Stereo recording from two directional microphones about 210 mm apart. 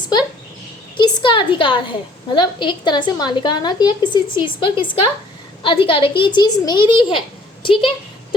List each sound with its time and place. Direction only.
0.9 s a woman's voice: 20° left (ahead or behind)